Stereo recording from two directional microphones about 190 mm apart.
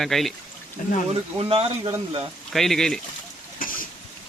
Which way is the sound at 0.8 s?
45° left (ahead or behind).